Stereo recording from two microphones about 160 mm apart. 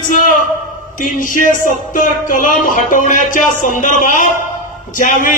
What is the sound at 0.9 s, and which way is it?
Speech, 55° left (ahead or behind).